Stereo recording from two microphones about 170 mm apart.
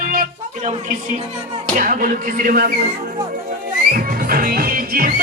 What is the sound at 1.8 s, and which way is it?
Speech, 55° right (ahead or behind).